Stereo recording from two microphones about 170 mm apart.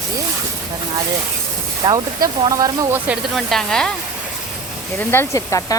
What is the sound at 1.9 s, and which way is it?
Speech, 25° right (ahead or behind).